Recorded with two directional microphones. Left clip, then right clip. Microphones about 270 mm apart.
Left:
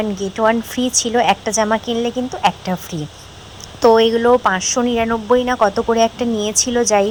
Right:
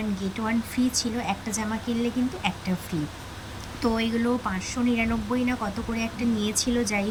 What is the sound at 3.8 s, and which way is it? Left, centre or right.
Speech, left.